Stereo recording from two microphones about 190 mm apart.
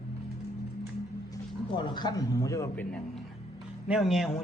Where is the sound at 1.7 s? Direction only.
25° left (ahead or behind).